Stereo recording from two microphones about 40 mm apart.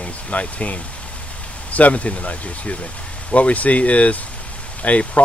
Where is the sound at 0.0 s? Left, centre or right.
Left.